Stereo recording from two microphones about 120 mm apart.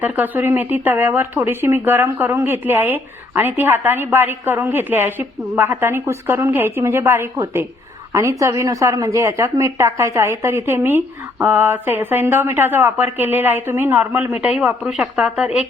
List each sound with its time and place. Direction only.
0.0 s a woman's voice: 15° right (ahead or behind)